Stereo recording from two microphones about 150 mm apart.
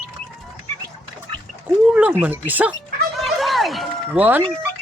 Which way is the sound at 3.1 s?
Centre (ahead or behind).